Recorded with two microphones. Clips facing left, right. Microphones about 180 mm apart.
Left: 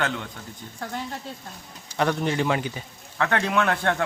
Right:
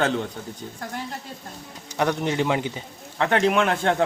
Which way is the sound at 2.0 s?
15° right (ahead or behind).